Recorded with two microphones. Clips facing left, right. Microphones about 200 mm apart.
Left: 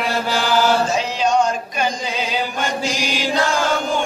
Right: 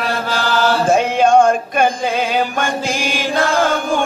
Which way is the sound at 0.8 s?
55° right (ahead or behind).